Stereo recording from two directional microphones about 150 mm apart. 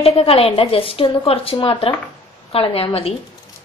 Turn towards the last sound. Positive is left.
turn(degrees=40)  # may be behind; listen again after turning